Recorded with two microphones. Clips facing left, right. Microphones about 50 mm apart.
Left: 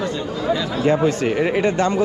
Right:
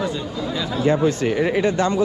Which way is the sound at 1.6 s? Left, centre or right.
Left.